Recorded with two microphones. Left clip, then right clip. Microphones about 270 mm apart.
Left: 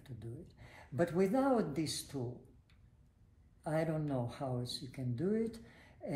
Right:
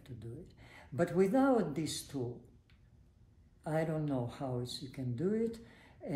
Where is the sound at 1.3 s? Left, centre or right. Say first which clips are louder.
Right 2 dB; centre.